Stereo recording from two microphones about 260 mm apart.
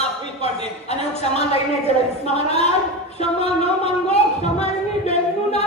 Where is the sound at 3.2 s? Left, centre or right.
Left.